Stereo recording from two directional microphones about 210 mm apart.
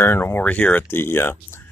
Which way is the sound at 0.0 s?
10° left (ahead or behind).